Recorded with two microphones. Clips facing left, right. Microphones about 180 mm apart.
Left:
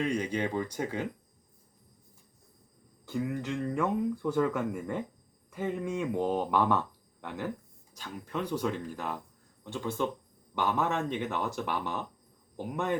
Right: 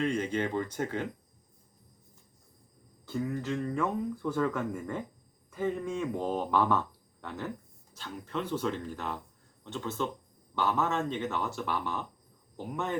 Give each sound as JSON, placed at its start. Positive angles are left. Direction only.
{"t": 0.0, "sound": "speech", "side_deg": 10}
{"t": 3.1, "sound": "speech", "side_deg": 10}
{"t": 7.9, "sound": "speech", "side_deg": 10}